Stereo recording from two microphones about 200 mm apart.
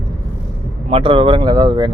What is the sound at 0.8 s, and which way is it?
Speech, 25° right (ahead or behind).